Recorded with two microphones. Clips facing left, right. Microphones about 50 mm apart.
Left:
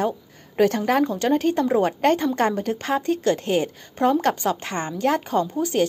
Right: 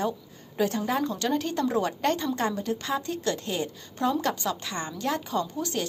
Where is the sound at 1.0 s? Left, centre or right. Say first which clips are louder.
Left 7 dB; left.